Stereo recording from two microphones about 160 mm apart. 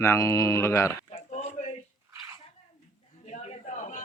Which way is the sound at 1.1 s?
45° left (ahead or behind).